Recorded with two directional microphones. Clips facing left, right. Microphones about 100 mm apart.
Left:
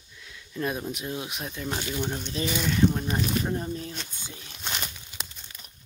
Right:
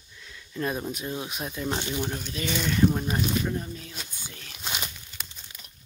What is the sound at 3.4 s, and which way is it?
Speech, 30° left (ahead or behind).